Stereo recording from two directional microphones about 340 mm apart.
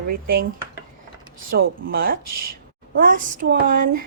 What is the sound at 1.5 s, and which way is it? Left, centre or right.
Speech, right.